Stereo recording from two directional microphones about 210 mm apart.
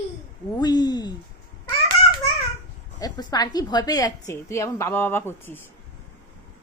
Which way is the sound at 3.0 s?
20° left (ahead or behind).